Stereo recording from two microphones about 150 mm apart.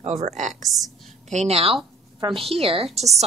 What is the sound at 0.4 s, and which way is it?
A woman's voice, 50° right (ahead or behind).